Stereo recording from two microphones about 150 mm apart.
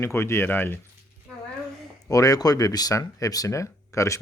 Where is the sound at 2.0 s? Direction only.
25° left (ahead or behind).